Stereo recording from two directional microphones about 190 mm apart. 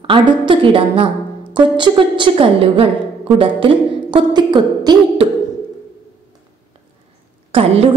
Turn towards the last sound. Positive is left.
turn(degrees=-30)  # may be behind; listen again after turning